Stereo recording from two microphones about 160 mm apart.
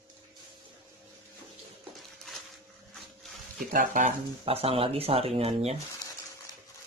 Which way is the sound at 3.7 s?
55° right (ahead or behind).